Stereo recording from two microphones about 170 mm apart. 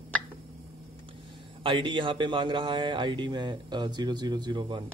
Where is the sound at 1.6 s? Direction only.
30° right (ahead or behind).